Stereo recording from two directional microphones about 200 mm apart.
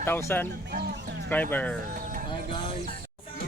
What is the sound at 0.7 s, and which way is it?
Speech, 55° right (ahead or behind).